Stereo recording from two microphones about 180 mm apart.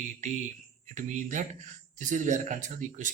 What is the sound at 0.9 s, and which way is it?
Speech, 45° right (ahead or behind).